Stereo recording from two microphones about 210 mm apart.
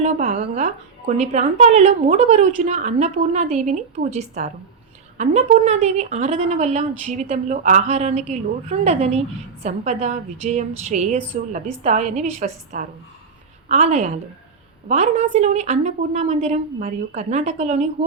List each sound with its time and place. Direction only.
0.0 s a woman's voice: 35° right (ahead or behind)